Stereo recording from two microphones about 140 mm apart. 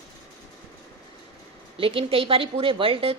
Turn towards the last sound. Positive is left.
turn(degrees=-40)  # may be behind; listen again after turning